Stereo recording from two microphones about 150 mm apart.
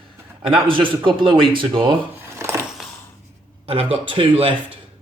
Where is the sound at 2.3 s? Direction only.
20° right (ahead or behind).